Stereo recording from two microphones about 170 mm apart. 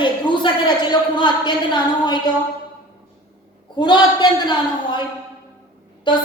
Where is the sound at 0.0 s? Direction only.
30° left (ahead or behind).